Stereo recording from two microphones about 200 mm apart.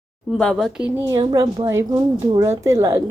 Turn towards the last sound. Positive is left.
turn(degrees=-15)  # may be behind; listen again after turning